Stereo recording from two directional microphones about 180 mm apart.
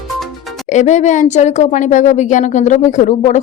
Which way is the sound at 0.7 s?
40° left (ahead or behind).